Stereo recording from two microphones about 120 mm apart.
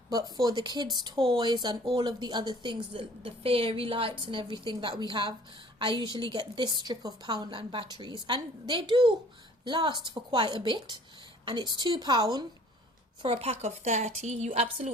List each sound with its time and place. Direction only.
0.1 s a woman's voice: 35° right (ahead or behind)
1.8 s speech: 50° right (ahead or behind)
2.0 s a woman's voice: 40° right (ahead or behind)
13.2 s a woman's voice: 55° right (ahead or behind)